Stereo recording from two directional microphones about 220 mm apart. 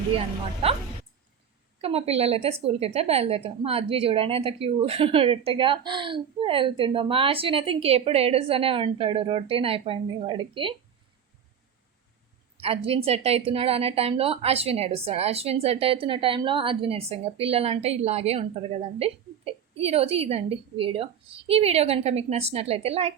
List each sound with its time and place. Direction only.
1.8 s a woman's voice: 25° right (ahead or behind)
12.5 s a woman's voice: 25° right (ahead or behind)